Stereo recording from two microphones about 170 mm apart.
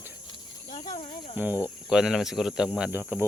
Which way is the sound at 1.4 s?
10° right (ahead or behind).